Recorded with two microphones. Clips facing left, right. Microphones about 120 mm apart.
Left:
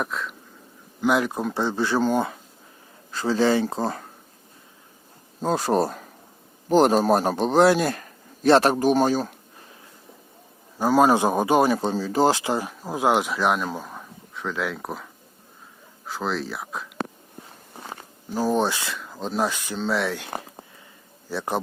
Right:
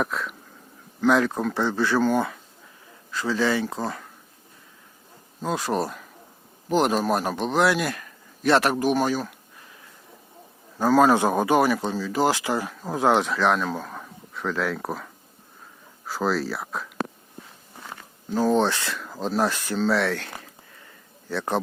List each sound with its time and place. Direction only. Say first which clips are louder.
0.0 s a sound: right 2 dB; centre (ahead or behind)
1.0 s speech: right 1 dB; 15° left (ahead or behind); by 4.1 s 35° left (ahead or behind)
5.4 s a man's voice: left 4 dB; 35° left (ahead or behind)
10.8 s speech: even; 15° left (ahead or behind)
12.8 s speech: right 1 dB; 10° left (ahead or behind)
18.3 s a man's voice: right 2 dB; 10° left (ahead or behind)